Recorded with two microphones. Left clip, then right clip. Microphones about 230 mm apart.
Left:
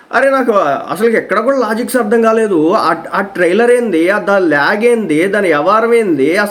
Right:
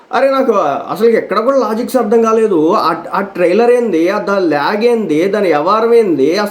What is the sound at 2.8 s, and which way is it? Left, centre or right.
Speech, right.